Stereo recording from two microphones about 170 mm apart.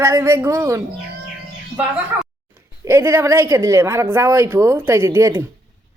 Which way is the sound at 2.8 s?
15° right (ahead or behind).